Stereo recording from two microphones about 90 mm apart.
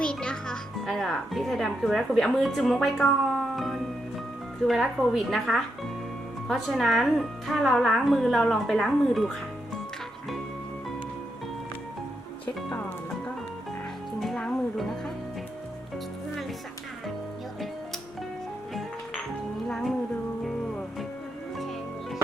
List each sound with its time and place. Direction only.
0.0 s a child's voice: 10° left (ahead or behind)
12.7 s music: 15° left (ahead or behind)
14.2 s music: 5° left (ahead or behind)
18.7 s music: centre (ahead or behind)